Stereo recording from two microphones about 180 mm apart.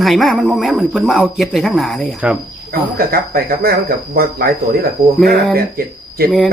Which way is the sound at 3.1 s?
55° right (ahead or behind).